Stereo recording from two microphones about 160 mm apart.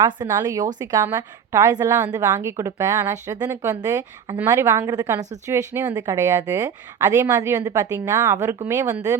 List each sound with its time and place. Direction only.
0.0 s a woman's voice: 25° right (ahead or behind)